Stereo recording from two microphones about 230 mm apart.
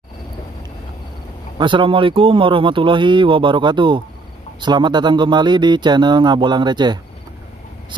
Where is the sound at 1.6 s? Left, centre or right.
Right.